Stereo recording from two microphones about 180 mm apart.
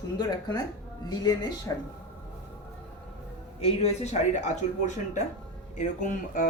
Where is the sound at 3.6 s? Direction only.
35° left (ahead or behind).